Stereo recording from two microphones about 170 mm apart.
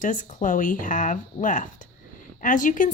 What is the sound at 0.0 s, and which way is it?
A woman's voice, 50° left (ahead or behind).